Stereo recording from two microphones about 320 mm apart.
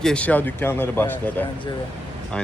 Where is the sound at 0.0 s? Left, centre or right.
Centre.